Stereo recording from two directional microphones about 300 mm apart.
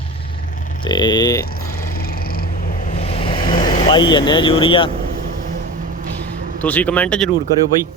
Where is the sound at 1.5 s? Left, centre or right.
Left.